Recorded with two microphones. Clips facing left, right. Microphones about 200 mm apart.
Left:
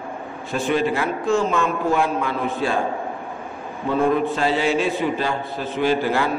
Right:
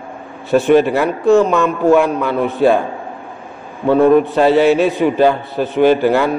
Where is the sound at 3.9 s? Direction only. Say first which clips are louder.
Right 9 dB; 65° right (ahead or behind).